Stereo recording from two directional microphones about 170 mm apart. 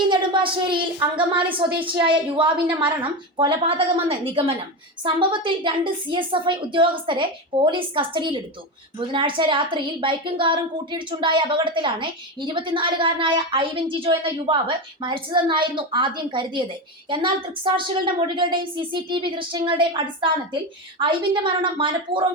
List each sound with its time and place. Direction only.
0.0 s a woman's voice: 30° right (ahead or behind)